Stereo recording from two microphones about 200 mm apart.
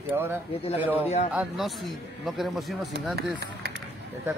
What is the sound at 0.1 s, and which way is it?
Speech, 10° right (ahead or behind).